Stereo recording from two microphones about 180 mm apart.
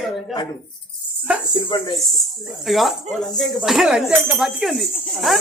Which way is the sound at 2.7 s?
Centre (ahead or behind).